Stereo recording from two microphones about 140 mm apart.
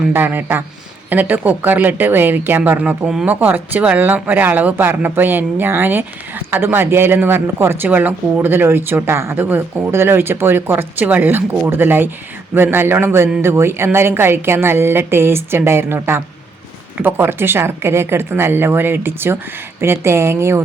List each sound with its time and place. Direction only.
0.1 s speech: 15° right (ahead or behind)